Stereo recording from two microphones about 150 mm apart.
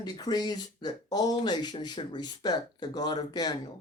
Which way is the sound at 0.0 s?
25° left (ahead or behind).